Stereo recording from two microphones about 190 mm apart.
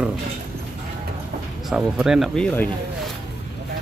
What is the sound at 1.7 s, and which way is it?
Speech, 5° right (ahead or behind).